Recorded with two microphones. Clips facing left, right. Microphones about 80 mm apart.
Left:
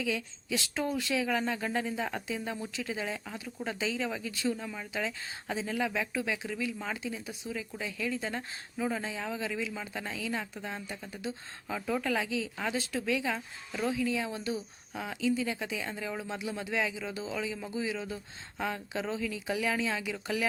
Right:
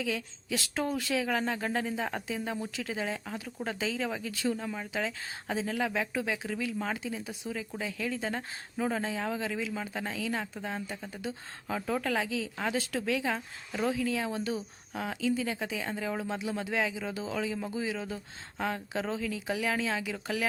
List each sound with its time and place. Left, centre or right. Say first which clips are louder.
0.0 s speech: even; right
10.8 s speech: right 2 dB; centre
11.7 s speech: right 1 dB; right
14.0 s speech: even; right
14.3 s speech: right 2 dB; right